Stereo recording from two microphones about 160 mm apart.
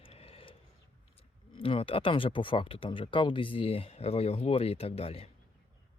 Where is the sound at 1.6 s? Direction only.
35° left (ahead or behind).